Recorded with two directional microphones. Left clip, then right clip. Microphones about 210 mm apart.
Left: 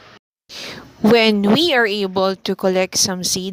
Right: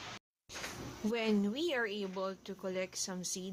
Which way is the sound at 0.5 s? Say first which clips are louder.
Left 12 dB; 35° left (ahead or behind).